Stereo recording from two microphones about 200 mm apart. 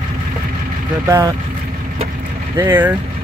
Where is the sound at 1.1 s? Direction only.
15° right (ahead or behind).